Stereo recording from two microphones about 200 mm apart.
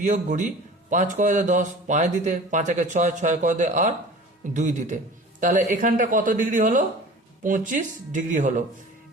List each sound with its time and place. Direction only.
0.0 s a man's voice: 35° right (ahead or behind)